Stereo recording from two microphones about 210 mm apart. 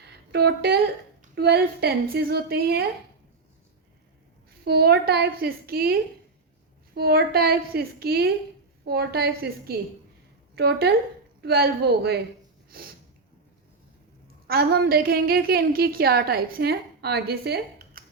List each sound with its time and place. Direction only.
0.1 s a woman's voice: 50° right (ahead or behind)
4.6 s a woman's voice: 50° right (ahead or behind)
14.4 s a woman's voice: 50° right (ahead or behind)